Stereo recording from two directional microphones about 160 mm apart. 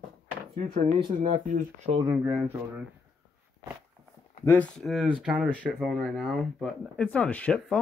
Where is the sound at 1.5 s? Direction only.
45° right (ahead or behind).